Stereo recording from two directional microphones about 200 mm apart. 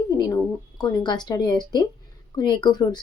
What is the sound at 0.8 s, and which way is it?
Speech, 20° left (ahead or behind).